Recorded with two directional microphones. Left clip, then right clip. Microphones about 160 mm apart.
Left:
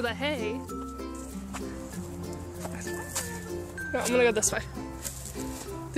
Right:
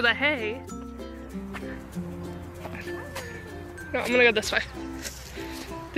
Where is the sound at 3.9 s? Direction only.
10° left (ahead or behind).